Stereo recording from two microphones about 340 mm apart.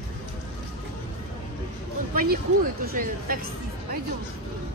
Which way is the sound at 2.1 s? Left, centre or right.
Right.